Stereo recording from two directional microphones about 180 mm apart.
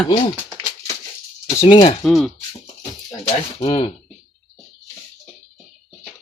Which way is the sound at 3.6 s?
20° left (ahead or behind).